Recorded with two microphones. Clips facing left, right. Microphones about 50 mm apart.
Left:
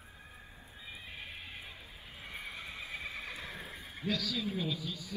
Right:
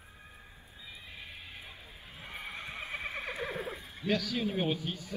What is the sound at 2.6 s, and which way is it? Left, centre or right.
Neigh, right.